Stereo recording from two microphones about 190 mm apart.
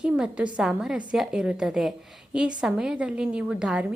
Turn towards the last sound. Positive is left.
turn(degrees=-5)  # may be behind; listen again after turning